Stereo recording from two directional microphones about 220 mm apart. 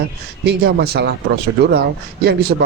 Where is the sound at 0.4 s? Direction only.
45° right (ahead or behind).